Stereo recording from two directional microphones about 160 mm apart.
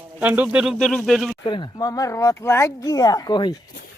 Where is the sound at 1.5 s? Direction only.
25° left (ahead or behind).